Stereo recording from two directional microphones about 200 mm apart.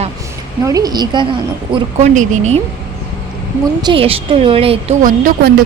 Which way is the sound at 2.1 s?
35° right (ahead or behind).